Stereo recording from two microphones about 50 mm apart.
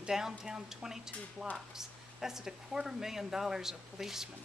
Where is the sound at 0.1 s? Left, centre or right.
Centre.